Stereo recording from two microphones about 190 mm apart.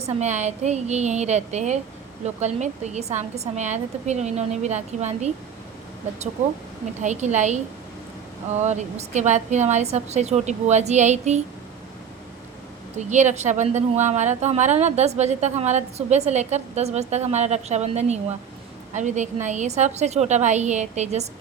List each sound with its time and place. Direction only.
0.0 s speech: 35° right (ahead or behind)
7.0 s speech: 40° right (ahead or behind)
8.6 s speech: 35° right (ahead or behind)
13.1 s speech: 40° right (ahead or behind)